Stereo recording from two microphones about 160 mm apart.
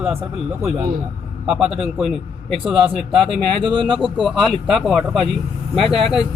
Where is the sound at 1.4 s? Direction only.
5° right (ahead or behind).